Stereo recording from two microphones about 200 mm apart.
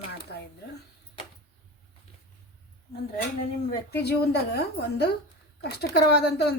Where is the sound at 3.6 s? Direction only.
55° left (ahead or behind).